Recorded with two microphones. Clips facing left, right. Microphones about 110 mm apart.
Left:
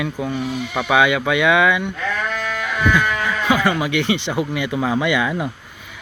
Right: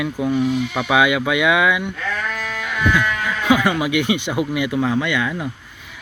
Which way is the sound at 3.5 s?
15° right (ahead or behind).